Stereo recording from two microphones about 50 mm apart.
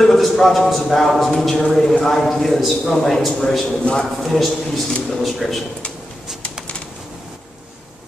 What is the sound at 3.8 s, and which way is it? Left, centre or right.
Speech, centre.